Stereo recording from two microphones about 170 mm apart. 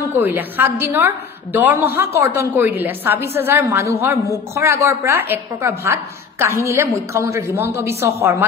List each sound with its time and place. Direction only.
0.2 s a woman's voice: 10° right (ahead or behind)